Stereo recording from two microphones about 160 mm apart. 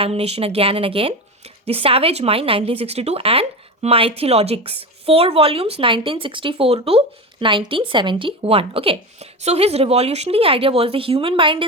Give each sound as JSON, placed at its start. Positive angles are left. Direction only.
{"t": 0.0, "sound": "a woman's voice", "side_deg": -40}